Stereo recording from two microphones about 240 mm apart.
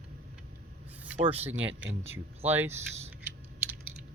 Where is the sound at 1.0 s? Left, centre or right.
Centre.